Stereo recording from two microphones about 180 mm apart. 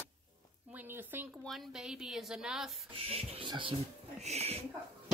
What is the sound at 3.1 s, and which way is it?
Speech, 30° right (ahead or behind).